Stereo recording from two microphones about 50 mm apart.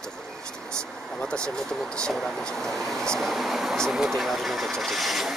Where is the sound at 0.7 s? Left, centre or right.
Centre.